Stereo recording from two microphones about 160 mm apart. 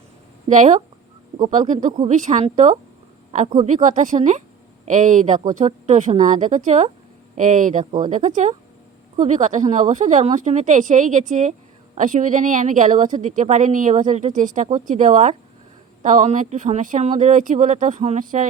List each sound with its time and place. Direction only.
0.4 s speech: 50° right (ahead or behind)